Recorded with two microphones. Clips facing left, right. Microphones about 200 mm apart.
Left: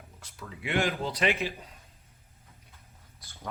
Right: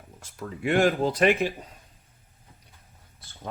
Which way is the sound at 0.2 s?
45° right (ahead or behind).